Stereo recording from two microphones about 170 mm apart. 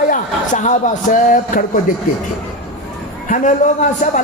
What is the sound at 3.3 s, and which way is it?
Speech, 45° left (ahead or behind).